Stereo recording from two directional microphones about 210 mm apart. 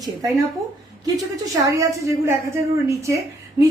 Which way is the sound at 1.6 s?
15° right (ahead or behind).